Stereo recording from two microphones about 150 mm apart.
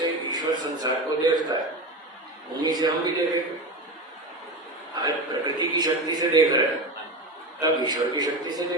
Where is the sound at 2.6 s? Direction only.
25° right (ahead or behind).